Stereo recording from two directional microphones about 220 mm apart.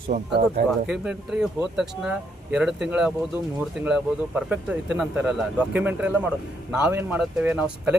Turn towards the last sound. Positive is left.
turn(degrees=-5)  # may be behind; listen again after turning